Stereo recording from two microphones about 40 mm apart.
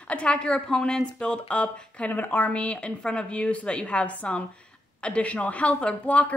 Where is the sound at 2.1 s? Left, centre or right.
Left.